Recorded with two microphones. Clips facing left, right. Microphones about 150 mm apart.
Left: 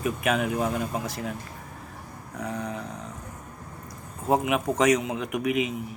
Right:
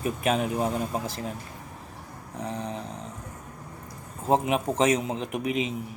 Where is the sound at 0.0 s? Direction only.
35° right (ahead or behind).